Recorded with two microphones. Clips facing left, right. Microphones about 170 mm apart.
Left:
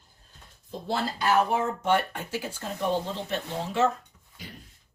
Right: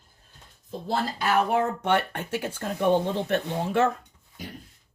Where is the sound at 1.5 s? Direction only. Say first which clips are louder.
Right 2 dB; 60° right (ahead or behind).